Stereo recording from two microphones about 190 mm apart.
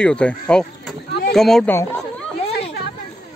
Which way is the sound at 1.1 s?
60° left (ahead or behind).